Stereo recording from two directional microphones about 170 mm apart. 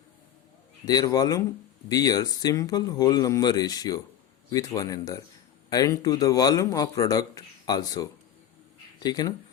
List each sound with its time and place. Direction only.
0.9 s speech: 20° left (ahead or behind)
9.0 s speech: 25° left (ahead or behind)